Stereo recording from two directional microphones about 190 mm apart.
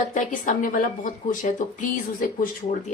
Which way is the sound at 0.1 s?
45° left (ahead or behind).